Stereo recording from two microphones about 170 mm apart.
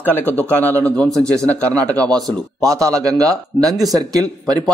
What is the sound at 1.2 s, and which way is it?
Speech, 20° right (ahead or behind).